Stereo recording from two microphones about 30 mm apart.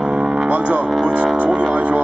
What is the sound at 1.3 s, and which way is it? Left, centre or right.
Music, right.